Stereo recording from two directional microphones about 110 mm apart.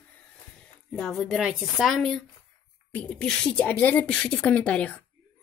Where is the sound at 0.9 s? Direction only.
5° left (ahead or behind).